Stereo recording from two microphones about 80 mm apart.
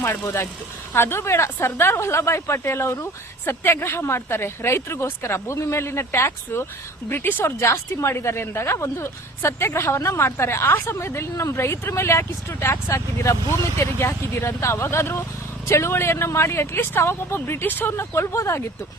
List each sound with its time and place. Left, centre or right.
0.9 s a woman's voice: left